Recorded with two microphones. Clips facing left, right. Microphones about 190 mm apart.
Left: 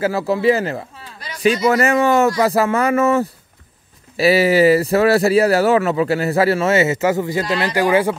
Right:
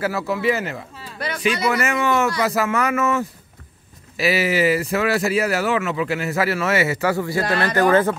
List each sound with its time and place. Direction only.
0.0 s speech: 30° left (ahead or behind); by 8.2 s 10° left (ahead or behind)